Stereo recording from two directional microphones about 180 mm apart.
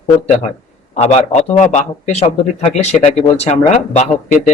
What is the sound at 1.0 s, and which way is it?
A man's voice, 40° left (ahead or behind).